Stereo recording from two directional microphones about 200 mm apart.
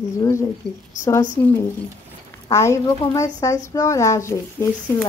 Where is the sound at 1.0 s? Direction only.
15° left (ahead or behind).